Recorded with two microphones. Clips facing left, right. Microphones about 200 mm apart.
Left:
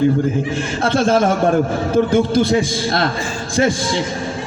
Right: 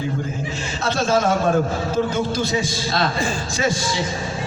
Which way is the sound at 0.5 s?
55° left (ahead or behind).